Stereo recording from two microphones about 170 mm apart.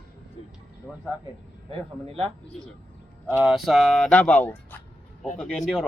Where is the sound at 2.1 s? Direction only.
35° right (ahead or behind).